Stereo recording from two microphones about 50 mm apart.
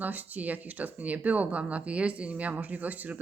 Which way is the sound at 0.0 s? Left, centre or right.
Right.